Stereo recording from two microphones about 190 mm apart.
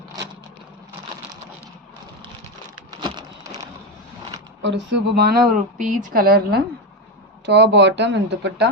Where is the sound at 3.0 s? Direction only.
20° right (ahead or behind).